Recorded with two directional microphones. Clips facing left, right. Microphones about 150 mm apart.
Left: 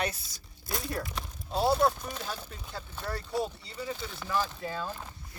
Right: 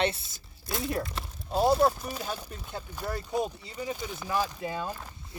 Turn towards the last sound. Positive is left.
turn(degrees=-15)  # may be behind; listen again after turning